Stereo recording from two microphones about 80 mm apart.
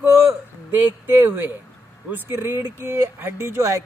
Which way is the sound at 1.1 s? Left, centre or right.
Right.